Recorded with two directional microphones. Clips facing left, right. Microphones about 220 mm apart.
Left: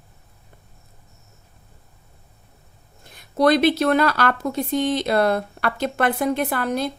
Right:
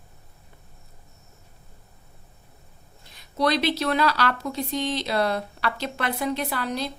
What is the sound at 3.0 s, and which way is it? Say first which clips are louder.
Speech: left 6 dB; 50° left (ahead or behind).